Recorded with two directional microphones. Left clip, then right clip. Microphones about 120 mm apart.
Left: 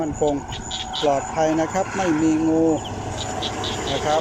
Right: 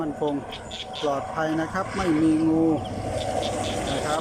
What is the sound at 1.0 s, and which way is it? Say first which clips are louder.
Speech: left 6 dB; 15° right (ahead or behind).